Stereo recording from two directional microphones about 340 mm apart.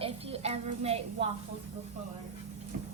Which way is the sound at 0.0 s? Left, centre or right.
Centre.